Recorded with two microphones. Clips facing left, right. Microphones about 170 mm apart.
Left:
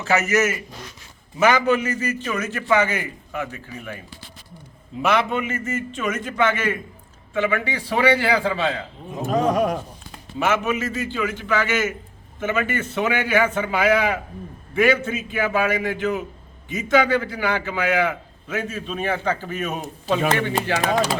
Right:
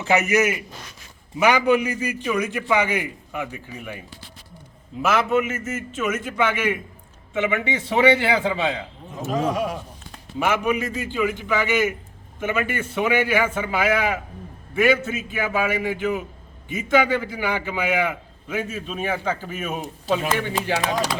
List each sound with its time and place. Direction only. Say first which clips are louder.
0.0 s a man's voice: right 1 dB; 15° right (ahead or behind)
5.0 s a man's voice: right 1 dB; 5° right (ahead or behind)
9.5 s speech: left 4 dB; 45° left (ahead or behind)
10.4 s a man's voice: even; 10° right (ahead or behind)